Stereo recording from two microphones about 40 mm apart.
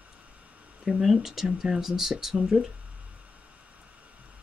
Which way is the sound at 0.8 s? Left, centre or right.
Centre.